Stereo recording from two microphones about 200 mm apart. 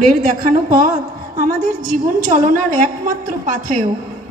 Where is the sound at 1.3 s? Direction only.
45° right (ahead or behind).